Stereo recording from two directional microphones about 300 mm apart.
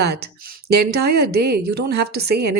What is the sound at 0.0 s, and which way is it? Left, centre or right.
Speech, right.